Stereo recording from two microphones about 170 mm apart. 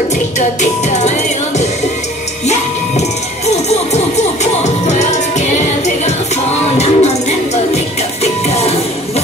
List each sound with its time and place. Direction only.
0.6 s music: 45° left (ahead or behind)
4.6 s music: 45° left (ahead or behind)
6.8 s music: 40° left (ahead or behind)